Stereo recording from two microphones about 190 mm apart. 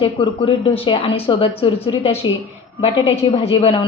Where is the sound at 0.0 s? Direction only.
30° left (ahead or behind).